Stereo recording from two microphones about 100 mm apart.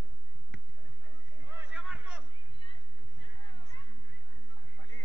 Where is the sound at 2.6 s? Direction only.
65° left (ahead or behind).